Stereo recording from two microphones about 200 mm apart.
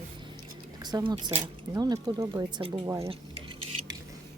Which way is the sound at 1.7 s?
20° right (ahead or behind).